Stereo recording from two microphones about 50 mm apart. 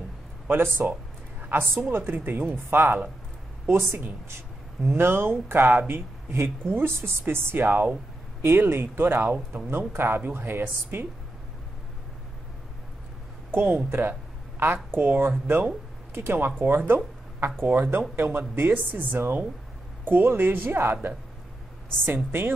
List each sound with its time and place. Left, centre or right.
0.5 s speech: right
8.4 s speech: right
13.5 s speech: right
13.8 s speech: right
14.6 s speech: right
18.5 s speech: right